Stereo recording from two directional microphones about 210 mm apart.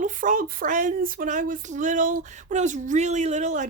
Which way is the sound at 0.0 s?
40° right (ahead or behind).